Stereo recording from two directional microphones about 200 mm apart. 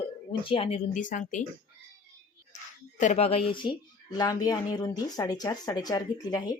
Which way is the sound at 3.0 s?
35° left (ahead or behind).